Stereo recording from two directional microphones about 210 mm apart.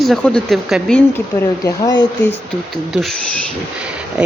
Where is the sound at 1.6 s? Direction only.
20° left (ahead or behind).